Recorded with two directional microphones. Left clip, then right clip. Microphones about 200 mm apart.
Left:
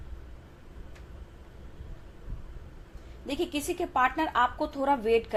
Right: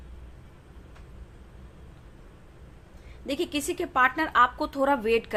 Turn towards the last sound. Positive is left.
turn(degrees=-25)  # may be behind; listen again after turning